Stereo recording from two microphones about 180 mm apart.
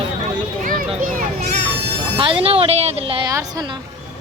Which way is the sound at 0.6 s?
50° right (ahead or behind).